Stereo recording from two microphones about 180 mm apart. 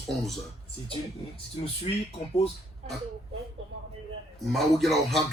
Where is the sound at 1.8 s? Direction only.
35° left (ahead or behind).